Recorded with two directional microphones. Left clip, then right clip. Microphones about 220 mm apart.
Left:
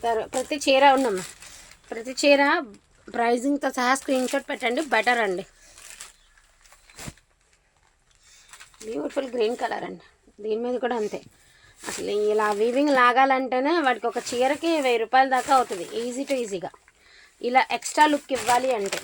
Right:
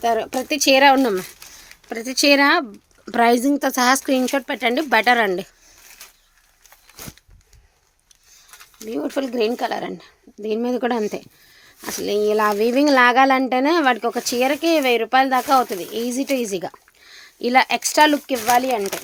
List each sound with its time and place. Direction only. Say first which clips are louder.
0.0 s speech: right 5 dB; 50° right (ahead or behind)
8.9 s speech: right 4 dB; 55° right (ahead or behind)